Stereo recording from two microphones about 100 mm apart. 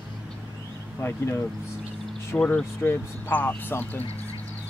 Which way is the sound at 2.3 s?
10° left (ahead or behind).